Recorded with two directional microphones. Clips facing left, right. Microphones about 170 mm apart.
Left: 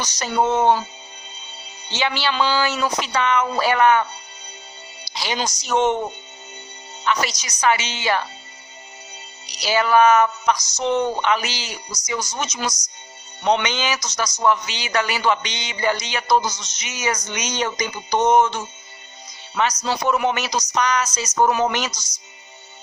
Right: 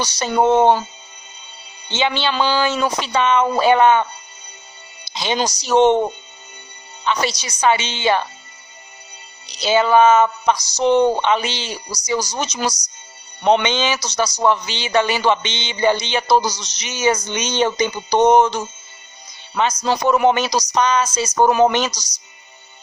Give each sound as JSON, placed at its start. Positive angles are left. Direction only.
{"t": 0.0, "sound": "a man's voice", "side_deg": -30}
{"t": 1.9, "sound": "a man's voice", "side_deg": -25}
{"t": 5.1, "sound": "a man's voice", "side_deg": -25}
{"t": 5.4, "sound": "speech", "side_deg": -35}
{"t": 7.1, "sound": "a man's voice", "side_deg": -30}
{"t": 9.5, "sound": "a man's voice", "side_deg": -25}
{"t": 19.8, "sound": "speech", "side_deg": -40}